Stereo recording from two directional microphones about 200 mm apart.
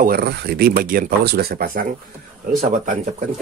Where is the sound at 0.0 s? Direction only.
50° right (ahead or behind).